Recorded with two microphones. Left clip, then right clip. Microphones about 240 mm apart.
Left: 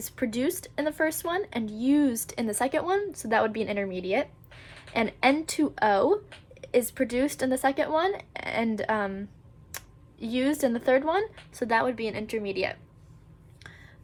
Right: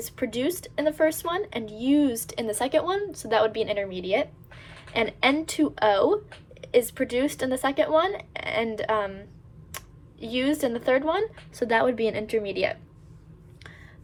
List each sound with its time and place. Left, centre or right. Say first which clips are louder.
0.2 s speech: right 1 dB; left
10.3 s speech: right 1 dB; left
11.9 s speech: right 6 dB; right